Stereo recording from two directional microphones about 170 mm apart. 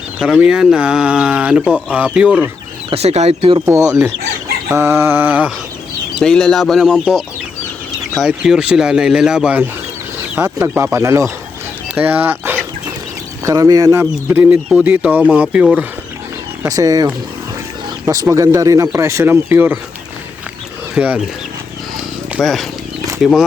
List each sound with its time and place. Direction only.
0.2 s speech: 5° right (ahead or behind)
2.9 s speech: 40° right (ahead or behind)
3.7 s speech: 15° right (ahead or behind)
6.2 s speech: 5° left (ahead or behind)
16.6 s speech: 20° right (ahead or behind)
20.9 s speech: 5° right (ahead or behind)
22.4 s speech: centre (ahead or behind)